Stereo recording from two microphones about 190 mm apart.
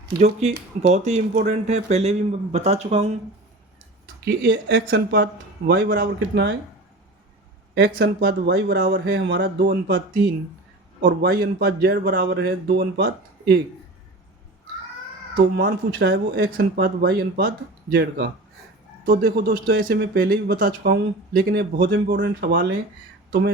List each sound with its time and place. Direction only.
0.8 s a man's voice: 35° right (ahead or behind)
4.0 s speech: 75° right (ahead or behind)
7.8 s speech: 55° right (ahead or behind)
11.0 s speech: 60° right (ahead or behind)
15.5 s speech: 55° right (ahead or behind)